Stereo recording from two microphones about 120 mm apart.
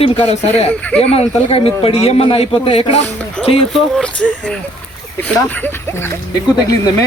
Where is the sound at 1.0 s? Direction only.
60° left (ahead or behind).